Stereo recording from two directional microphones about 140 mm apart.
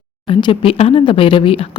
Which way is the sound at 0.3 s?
40° left (ahead or behind).